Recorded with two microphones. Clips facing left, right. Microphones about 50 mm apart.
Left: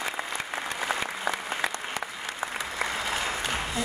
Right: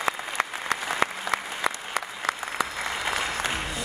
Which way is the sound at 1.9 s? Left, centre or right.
Right.